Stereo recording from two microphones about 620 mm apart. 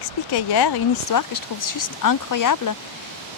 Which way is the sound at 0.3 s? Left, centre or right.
Left.